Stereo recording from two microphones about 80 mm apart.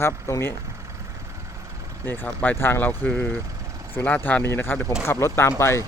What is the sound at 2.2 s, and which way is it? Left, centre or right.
Speech, left.